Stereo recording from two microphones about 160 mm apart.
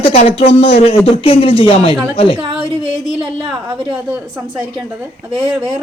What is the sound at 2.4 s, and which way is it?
A woman's voice, 30° right (ahead or behind).